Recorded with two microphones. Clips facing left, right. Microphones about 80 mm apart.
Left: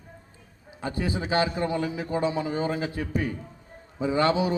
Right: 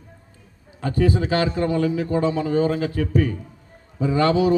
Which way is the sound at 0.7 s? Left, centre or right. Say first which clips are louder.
Right 8 dB; centre.